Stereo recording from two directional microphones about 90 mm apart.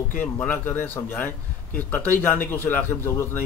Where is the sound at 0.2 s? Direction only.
20° left (ahead or behind).